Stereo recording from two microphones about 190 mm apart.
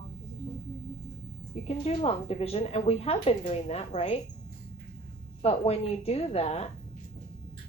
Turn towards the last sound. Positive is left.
turn(degrees=35)  # may be behind; listen again after turning